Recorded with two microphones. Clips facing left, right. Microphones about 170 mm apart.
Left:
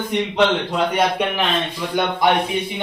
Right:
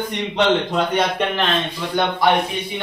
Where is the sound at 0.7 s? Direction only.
10° left (ahead or behind).